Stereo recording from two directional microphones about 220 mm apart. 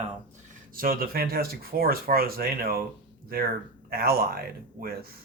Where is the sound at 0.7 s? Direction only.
40° right (ahead or behind).